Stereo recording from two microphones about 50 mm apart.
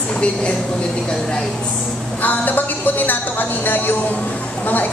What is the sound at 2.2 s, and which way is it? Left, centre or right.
Speech, left.